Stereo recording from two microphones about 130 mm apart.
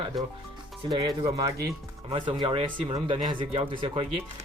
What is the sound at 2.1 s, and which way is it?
Speech, 40° right (ahead or behind).